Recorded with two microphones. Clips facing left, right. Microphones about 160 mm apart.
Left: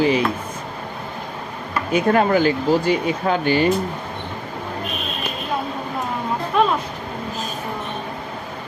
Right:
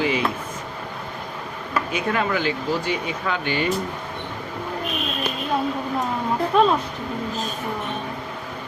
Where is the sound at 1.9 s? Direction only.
40° left (ahead or behind).